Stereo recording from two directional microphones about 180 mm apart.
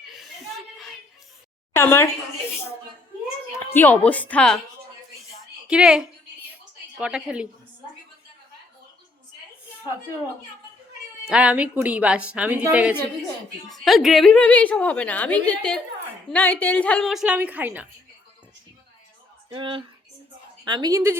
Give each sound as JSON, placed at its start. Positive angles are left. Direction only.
{"t": 0.0, "sound": "chuckle", "side_deg": 0}
{"t": 1.7, "sound": "a woman's voice", "side_deg": 15}
{"t": 3.7, "sound": "a woman's voice", "side_deg": 10}
{"t": 5.6, "sound": "a woman's voice", "side_deg": -5}
{"t": 11.3, "sound": "a woman's voice", "side_deg": -5}
{"t": 19.5, "sound": "speech", "side_deg": -30}